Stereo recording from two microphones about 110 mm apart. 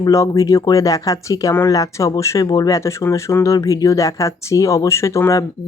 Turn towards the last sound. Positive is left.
turn(degrees=30)  # may be behind; listen again after turning